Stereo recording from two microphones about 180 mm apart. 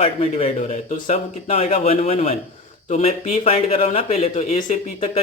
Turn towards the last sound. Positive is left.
turn(degrees=45)  # may be behind; listen again after turning